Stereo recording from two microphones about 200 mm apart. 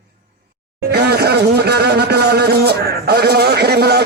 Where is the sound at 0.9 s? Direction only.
55° right (ahead or behind).